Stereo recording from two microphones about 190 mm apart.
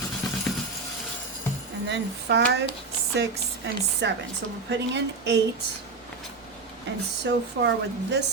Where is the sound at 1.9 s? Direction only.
65° right (ahead or behind).